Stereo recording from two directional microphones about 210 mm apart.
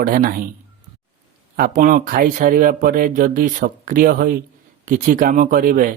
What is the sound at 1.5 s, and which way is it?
Speech, 40° right (ahead or behind).